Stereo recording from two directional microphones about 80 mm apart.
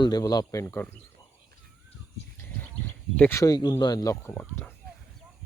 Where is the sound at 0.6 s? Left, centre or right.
Left.